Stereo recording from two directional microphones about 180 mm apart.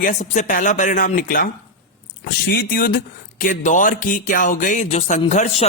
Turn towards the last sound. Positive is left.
turn(degrees=40)  # may be behind; listen again after turning